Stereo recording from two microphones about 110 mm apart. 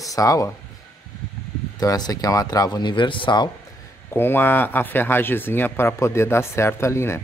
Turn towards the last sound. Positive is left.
turn(degrees=25)  # may be behind; listen again after turning